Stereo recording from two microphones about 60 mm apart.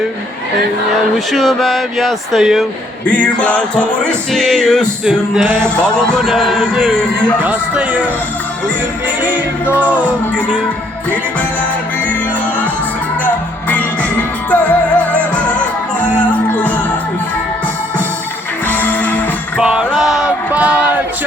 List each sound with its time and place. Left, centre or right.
1.3 s speech: centre
3.1 s music: centre
4.3 s speech: centre
5.0 s music: centre
6.2 s speech: centre
7.4 s music: right
9.2 s music: right
13.7 s music: left
18.7 s music: left
19.5 s music: centre
20.5 s music: right